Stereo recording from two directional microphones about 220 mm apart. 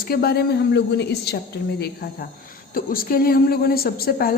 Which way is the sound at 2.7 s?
40° left (ahead or behind).